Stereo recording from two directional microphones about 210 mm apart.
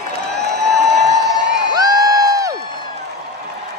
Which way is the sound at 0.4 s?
50° right (ahead or behind).